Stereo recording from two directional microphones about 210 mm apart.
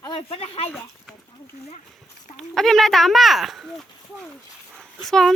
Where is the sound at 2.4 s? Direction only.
Centre (ahead or behind).